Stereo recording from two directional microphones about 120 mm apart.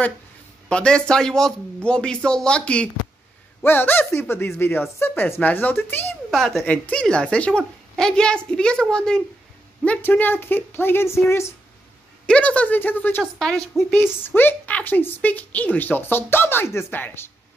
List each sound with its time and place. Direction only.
0.7 s a woman's voice: 10° left (ahead or behind)
6.3 s a woman's voice: centre (ahead or behind); by 11.5 s 20° left (ahead or behind)
12.3 s a woman's voice: 10° left (ahead or behind)
13.2 s a woman's voice: 5° left (ahead or behind)
13.9 s a woman's voice: 20° left (ahead or behind)